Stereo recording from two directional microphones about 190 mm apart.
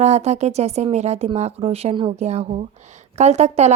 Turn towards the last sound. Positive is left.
turn(degrees=-35)  # may be behind; listen again after turning